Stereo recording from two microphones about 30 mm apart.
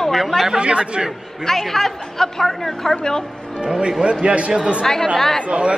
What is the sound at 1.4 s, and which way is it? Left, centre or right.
A woman's voice, centre.